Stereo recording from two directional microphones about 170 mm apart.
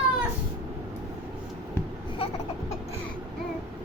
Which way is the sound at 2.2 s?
35° left (ahead or behind).